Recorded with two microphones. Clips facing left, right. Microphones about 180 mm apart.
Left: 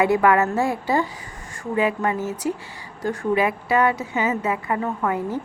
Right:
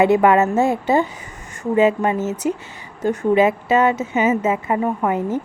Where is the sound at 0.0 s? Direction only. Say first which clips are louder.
Right 4 dB; 25° right (ahead or behind).